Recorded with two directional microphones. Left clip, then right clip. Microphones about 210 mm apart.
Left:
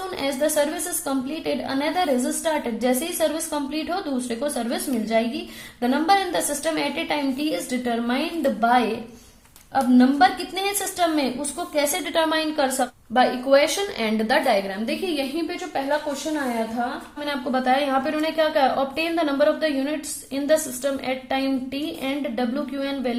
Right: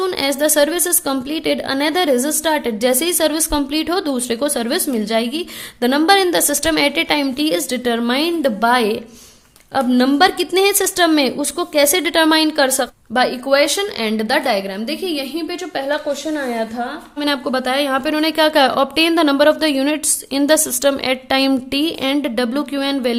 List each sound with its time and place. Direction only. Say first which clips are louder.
0.0 s a woman's voice: right 7 dB; 50° right (ahead or behind)
13.1 s a woman's voice: right 3 dB; 35° right (ahead or behind)
17.2 s a woman's voice: right 7 dB; 45° right (ahead or behind)